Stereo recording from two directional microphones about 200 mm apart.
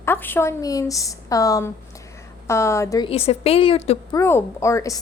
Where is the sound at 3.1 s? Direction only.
30° left (ahead or behind).